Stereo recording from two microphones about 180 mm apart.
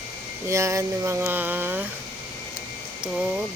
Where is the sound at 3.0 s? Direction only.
5° right (ahead or behind).